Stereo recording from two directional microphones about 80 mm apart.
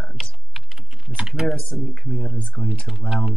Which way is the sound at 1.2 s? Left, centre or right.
Centre.